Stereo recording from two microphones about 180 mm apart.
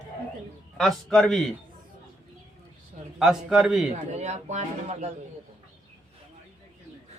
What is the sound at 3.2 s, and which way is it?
Speech, 5° right (ahead or behind).